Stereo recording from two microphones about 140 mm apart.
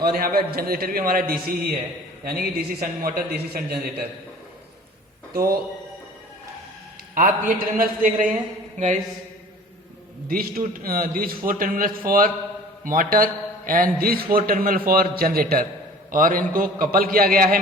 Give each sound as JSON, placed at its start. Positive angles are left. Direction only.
{"t": 0.0, "sound": "a man's voice", "side_deg": -90}
{"t": 5.3, "sound": "a man's voice", "side_deg": -90}
{"t": 7.1, "sound": "a man's voice", "side_deg": -80}
{"t": 10.2, "sound": "a man's voice", "side_deg": -90}
{"t": 16.1, "sound": "a man's voice", "side_deg": -80}
{"t": 16.5, "sound": "a man's voice", "side_deg": -90}